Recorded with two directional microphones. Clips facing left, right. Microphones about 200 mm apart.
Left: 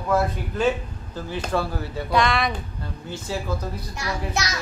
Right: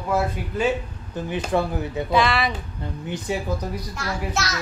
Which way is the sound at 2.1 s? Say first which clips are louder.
Even; 5° right (ahead or behind).